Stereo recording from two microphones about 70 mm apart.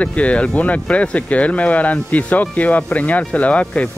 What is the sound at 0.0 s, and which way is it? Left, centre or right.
Speech, centre.